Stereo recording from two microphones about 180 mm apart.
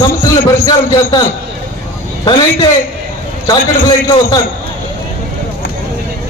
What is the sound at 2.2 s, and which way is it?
Speech, 25° left (ahead or behind).